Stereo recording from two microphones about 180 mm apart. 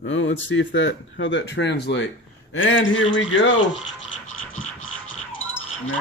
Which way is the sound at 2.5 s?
90° left.